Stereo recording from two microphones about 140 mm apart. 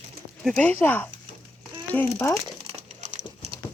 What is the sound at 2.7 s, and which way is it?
Crumpling, 50° right (ahead or behind).